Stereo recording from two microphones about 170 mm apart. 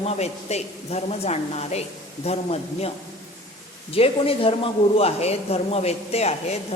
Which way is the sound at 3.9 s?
35° left (ahead or behind).